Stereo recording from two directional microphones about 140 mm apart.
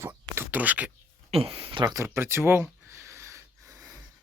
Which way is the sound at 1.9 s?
20° right (ahead or behind).